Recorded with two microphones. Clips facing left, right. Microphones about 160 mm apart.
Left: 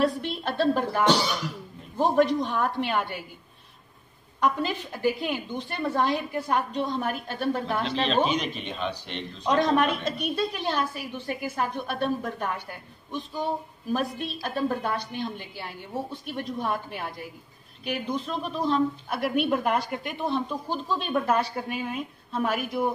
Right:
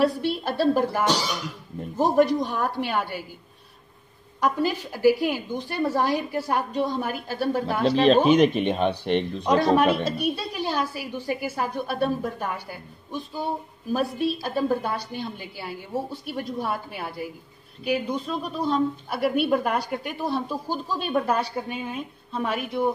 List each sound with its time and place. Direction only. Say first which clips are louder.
0.0 s a woman's voice: right 3 dB; 5° right (ahead or behind)
4.4 s a woman's voice: right 2 dB; 5° right (ahead or behind)
8.3 s speech: right 11 dB; 50° right (ahead or behind)
9.4 s speech: right 1 dB; 5° right (ahead or behind)